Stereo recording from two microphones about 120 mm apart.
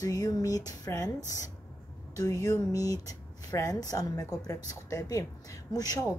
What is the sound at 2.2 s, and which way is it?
A woman's voice, 25° left (ahead or behind).